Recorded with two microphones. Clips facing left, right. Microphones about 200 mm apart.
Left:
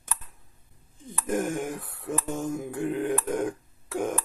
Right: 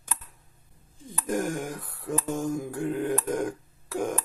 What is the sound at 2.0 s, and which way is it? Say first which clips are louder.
Mantra: right 2 dB; 5° left (ahead or behind).